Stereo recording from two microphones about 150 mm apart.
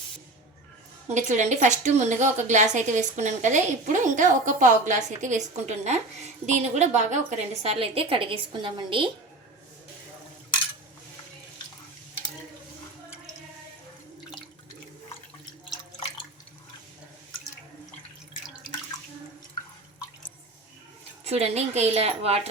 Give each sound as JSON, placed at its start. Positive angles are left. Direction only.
{"t": 1.0, "sound": "a woman's voice", "side_deg": -50}
{"t": 21.2, "sound": "a woman's voice", "side_deg": -45}